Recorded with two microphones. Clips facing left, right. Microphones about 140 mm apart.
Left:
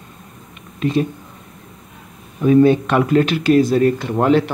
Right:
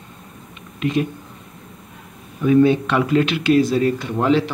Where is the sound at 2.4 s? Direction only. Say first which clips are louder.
Left 2 dB; 35° left (ahead or behind).